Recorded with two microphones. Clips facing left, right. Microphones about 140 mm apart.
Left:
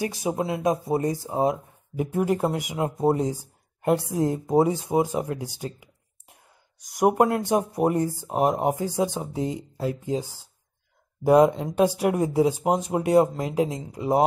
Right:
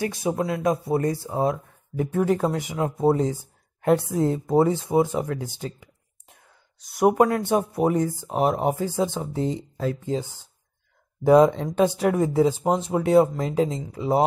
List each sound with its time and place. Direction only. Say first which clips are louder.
0.0 s speech: right 1 dB; 15° left (ahead or behind)